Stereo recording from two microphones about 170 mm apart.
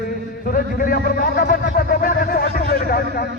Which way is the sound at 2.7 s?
60° left (ahead or behind).